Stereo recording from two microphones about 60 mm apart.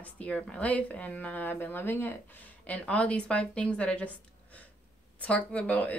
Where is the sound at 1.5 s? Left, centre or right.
Left.